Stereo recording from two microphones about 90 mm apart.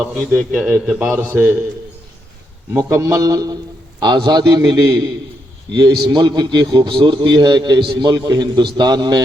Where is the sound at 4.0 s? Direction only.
55° right (ahead or behind).